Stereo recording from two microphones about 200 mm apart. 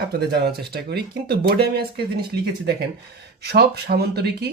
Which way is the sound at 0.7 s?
55° right (ahead or behind).